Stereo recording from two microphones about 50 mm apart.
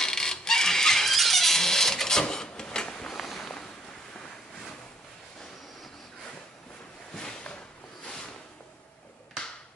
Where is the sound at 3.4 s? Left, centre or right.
Centre.